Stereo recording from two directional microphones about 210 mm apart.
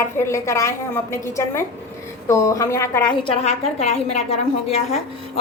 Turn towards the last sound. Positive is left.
turn(degrees=30)  # may be behind; listen again after turning